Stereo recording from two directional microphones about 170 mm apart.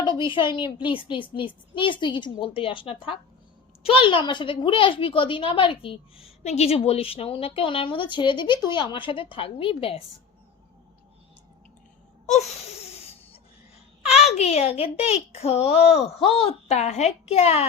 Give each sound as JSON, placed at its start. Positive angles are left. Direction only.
{"t": 0.0, "sound": "a woman's voice", "side_deg": 30}
{"t": 12.8, "sound": "a sound", "side_deg": 35}
{"t": 14.3, "sound": "a woman's voice", "side_deg": 40}